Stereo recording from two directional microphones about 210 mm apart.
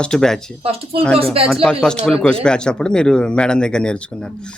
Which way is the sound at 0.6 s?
30° right (ahead or behind).